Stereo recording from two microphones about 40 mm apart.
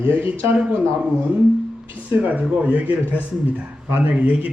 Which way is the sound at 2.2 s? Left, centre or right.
Right.